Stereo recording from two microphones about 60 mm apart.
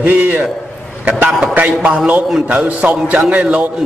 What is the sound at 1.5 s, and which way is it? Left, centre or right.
A man's voice, right.